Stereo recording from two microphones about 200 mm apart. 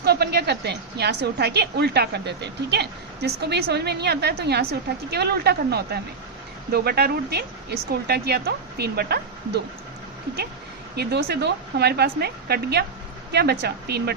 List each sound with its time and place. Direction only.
0.0 s a woman's voice: 50° right (ahead or behind)
10.9 s a woman's voice: 55° right (ahead or behind)